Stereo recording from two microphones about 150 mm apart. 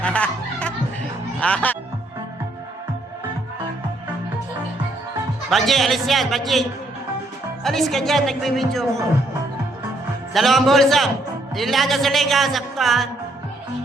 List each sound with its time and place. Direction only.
0.0 s music: 10° left (ahead or behind)
1.4 s speech: 10° left (ahead or behind)
5.5 s a man's voice: centre (ahead or behind)
10.3 s a man's voice: centre (ahead or behind)